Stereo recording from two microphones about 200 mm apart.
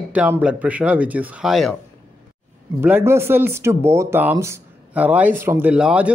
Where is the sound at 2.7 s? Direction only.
10° right (ahead or behind).